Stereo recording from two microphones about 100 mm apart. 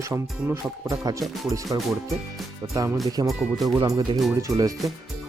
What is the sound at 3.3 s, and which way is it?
Speech, centre (ahead or behind).